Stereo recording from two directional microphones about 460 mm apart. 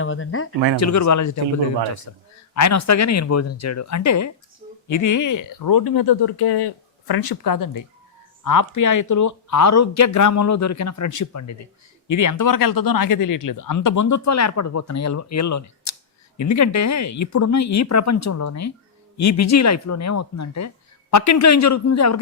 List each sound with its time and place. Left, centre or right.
0.0 s speech: left
0.8 s speech: left